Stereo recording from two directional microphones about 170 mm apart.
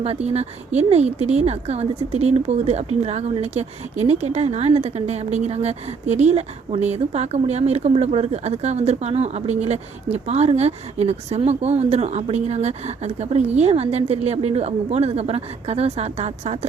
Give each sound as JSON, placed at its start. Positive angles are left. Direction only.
{"t": 0.0, "sound": "speech", "side_deg": -40}